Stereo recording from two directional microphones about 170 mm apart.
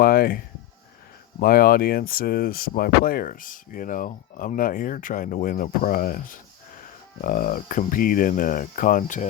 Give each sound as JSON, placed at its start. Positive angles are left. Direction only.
{"t": 0.0, "sound": "speech", "side_deg": 60}